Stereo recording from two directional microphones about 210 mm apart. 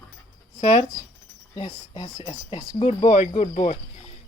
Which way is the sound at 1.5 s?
25° left (ahead or behind).